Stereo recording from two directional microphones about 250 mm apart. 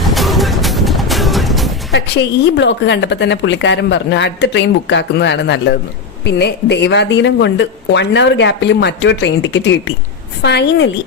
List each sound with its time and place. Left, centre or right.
0.0 s music: centre
1.9 s a woman's voice: left